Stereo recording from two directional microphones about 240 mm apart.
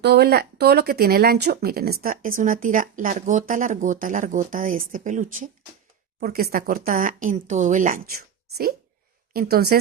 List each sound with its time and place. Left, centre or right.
0.0 s speech: right